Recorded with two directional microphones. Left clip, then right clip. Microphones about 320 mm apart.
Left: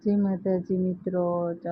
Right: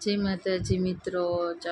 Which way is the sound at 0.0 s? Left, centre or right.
Centre.